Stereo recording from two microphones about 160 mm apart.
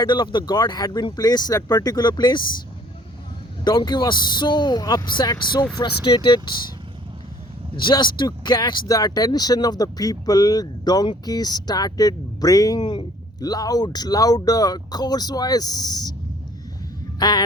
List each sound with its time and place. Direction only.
0.0 s speech: 30° left (ahead or behind)
3.6 s speech: 25° left (ahead or behind)
7.8 s speech: 30° left (ahead or behind)
17.2 s a sound: 25° left (ahead or behind)